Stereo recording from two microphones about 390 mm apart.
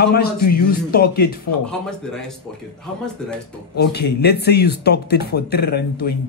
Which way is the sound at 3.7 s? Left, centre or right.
Left.